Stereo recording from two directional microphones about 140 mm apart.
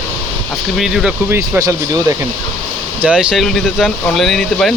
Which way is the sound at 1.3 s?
25° right (ahead or behind).